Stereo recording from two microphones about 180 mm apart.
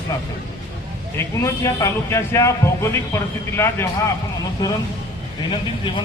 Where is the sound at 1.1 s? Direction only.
15° left (ahead or behind).